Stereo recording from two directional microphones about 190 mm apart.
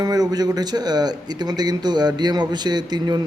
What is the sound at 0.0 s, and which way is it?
Speech, 20° right (ahead or behind).